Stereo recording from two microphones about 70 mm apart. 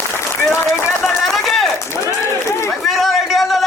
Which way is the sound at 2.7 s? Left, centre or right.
Centre.